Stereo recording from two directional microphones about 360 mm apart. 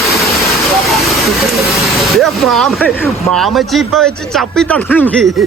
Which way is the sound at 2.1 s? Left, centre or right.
Centre.